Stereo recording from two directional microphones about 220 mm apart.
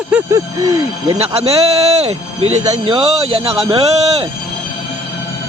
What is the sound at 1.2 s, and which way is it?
A man's voice, 25° right (ahead or behind).